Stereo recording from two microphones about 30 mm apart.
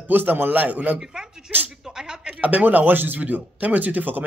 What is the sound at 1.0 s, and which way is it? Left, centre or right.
Speech, centre.